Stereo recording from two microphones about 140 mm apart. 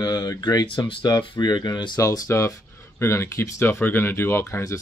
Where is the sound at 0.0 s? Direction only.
30° left (ahead or behind).